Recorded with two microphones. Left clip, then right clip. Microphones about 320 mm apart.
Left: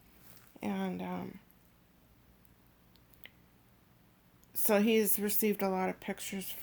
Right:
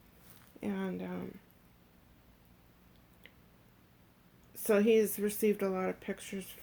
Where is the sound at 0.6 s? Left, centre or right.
Left.